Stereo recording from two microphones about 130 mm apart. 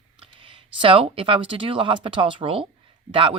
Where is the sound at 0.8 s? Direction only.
45° right (ahead or behind).